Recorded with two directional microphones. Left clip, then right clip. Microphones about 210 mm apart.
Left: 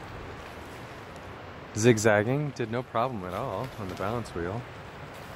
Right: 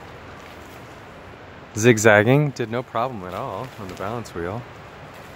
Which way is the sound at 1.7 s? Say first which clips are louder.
Right 8 dB; 15° right (ahead or behind).